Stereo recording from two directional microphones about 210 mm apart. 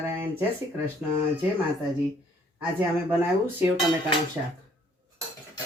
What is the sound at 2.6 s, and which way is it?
Speech, 10° right (ahead or behind).